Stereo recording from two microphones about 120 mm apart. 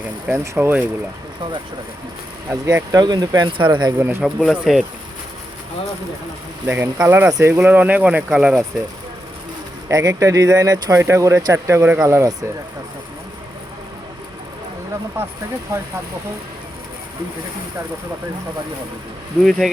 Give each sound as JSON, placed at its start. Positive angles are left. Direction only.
{"t": 0.3, "sound": "speech", "side_deg": -20}
{"t": 2.5, "sound": "speech", "side_deg": -20}
{"t": 2.9, "sound": "speech", "side_deg": -35}
{"t": 3.9, "sound": "speech", "side_deg": -20}
{"t": 4.2, "sound": "speech", "side_deg": 5}
{"t": 6.7, "sound": "speech", "side_deg": -15}
{"t": 9.9, "sound": "speech", "side_deg": -30}
{"t": 19.5, "sound": "speech", "side_deg": 0}